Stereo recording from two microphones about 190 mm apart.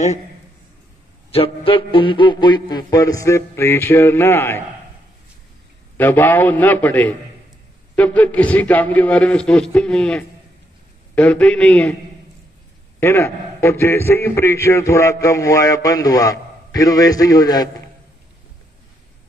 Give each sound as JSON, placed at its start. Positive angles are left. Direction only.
{"t": 1.3, "sound": "a man's voice", "side_deg": 30}
{"t": 5.9, "sound": "a man's voice", "side_deg": 10}
{"t": 13.0, "sound": "a man's voice", "side_deg": 15}